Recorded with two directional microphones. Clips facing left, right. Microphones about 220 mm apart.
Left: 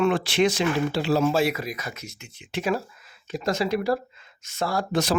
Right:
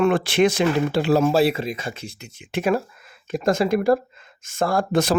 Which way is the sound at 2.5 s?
55° right (ahead or behind).